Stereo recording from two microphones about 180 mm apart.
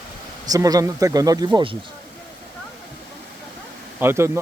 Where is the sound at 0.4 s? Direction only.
20° right (ahead or behind).